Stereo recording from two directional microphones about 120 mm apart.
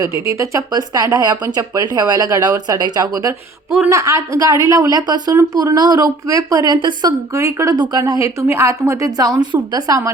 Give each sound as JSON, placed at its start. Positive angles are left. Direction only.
{"t": 0.0, "sound": "speech", "side_deg": -25}
{"t": 7.3, "sound": "speech", "side_deg": -25}